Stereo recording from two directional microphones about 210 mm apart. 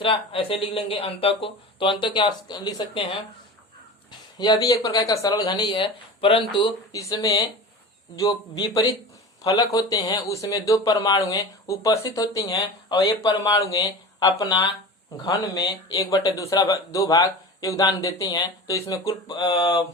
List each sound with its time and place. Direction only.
0.0 s speech: 25° left (ahead or behind)
4.4 s speech: 20° left (ahead or behind)